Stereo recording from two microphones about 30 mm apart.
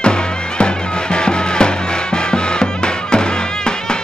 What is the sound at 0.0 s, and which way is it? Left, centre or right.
Music, left.